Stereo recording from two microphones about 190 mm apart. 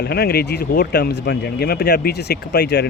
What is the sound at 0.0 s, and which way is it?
Speech, 55° left (ahead or behind).